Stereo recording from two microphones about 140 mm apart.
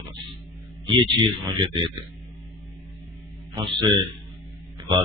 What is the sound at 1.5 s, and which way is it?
Speech, 35° right (ahead or behind).